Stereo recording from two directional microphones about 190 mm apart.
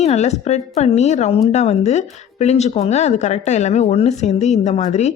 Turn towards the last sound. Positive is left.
turn(degrees=35)  # may be behind; listen again after turning